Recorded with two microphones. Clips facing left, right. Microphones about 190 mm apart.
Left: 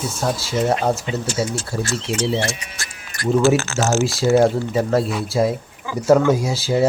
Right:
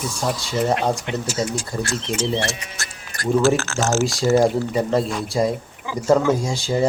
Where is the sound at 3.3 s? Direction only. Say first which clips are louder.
Left 2 dB; centre (ahead or behind).